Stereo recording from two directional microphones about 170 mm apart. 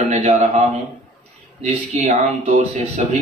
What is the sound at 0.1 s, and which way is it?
A man's voice, 45° right (ahead or behind).